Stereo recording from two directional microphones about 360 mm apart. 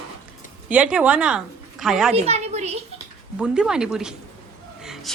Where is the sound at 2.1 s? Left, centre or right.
Centre.